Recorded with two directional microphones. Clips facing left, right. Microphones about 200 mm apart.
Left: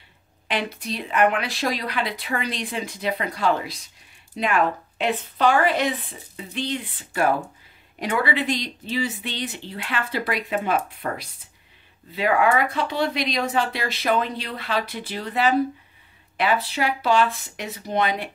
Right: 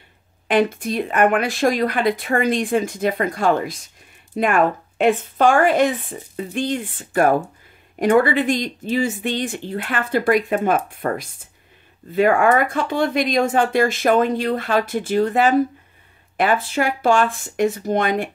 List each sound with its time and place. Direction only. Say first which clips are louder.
0.5 s speech: right 9 dB; 50° right (ahead or behind)